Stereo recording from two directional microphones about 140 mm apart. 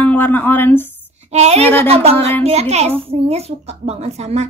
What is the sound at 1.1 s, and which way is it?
A woman's voice, 55° right (ahead or behind).